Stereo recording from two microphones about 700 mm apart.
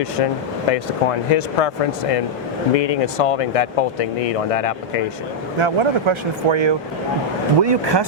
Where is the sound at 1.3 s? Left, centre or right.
Left.